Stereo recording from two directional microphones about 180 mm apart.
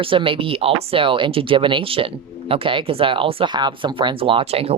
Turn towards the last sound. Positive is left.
turn(degrees=-35)  # may be behind; listen again after turning